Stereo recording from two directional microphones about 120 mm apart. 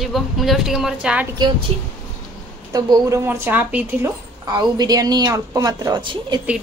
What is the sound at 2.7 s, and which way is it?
A woman's voice, 25° right (ahead or behind).